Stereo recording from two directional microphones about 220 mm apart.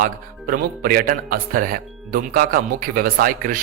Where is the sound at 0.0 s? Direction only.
40° right (ahead or behind).